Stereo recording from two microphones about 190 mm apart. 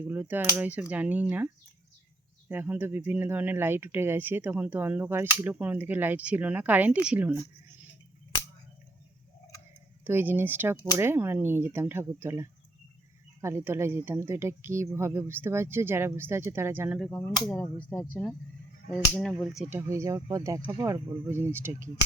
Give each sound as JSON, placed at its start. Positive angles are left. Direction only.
{"t": 0.0, "sound": "speech", "side_deg": -10}
{"t": 2.5, "sound": "speech", "side_deg": -10}
{"t": 10.0, "sound": "speech", "side_deg": -10}
{"t": 17.1, "sound": "speech", "side_deg": 5}
{"t": 19.3, "sound": "speech", "side_deg": -5}